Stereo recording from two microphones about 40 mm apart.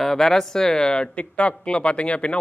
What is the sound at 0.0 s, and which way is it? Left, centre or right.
Speech, centre.